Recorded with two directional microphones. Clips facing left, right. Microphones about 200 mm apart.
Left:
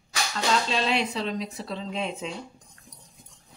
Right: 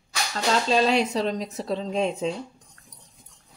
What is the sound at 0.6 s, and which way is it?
Speech, 40° right (ahead or behind).